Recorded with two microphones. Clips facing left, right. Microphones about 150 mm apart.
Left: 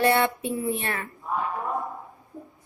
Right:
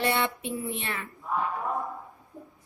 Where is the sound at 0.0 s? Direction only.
50° left (ahead or behind).